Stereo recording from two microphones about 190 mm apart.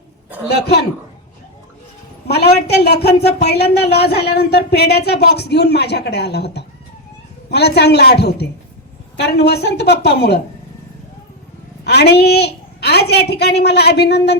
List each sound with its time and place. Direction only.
0.4 s speech: 60° left (ahead or behind)
2.2 s speech: 60° left (ahead or behind)
11.9 s a woman's voice: 60° left (ahead or behind)